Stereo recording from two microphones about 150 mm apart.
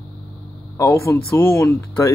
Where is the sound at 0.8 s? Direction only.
20° left (ahead or behind).